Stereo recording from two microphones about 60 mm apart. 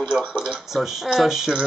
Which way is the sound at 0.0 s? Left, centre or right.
Centre.